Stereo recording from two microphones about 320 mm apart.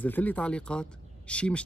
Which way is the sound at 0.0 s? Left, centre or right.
Centre.